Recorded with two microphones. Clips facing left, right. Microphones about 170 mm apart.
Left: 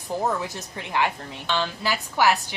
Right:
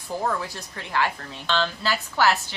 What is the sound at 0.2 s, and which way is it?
Speech, 20° left (ahead or behind).